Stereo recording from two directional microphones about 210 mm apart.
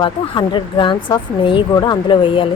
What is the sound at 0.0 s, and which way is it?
Speech, 20° left (ahead or behind).